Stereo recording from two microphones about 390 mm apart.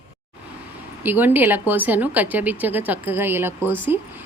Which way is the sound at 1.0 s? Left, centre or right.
Centre.